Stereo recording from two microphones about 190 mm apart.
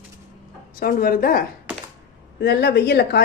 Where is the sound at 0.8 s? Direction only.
50° left (ahead or behind).